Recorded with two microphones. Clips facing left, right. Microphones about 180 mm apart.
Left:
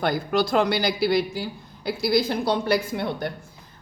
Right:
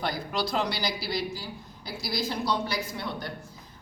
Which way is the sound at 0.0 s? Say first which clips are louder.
Left 7 dB; 55° left (ahead or behind).